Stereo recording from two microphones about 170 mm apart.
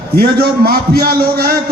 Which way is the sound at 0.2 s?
60° right (ahead or behind).